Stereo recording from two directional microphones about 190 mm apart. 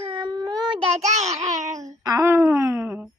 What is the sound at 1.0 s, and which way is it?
Speech, 35° right (ahead or behind).